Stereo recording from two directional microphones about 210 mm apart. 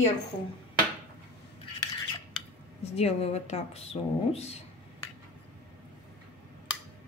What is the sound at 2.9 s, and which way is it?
Speech, 30° left (ahead or behind).